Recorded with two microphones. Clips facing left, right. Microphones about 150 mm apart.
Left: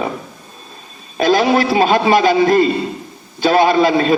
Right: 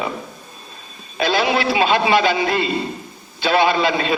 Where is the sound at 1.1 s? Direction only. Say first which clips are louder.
Left 5 dB; 45° left (ahead or behind).